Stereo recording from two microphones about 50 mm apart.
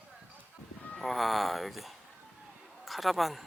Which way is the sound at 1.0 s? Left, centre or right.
Centre.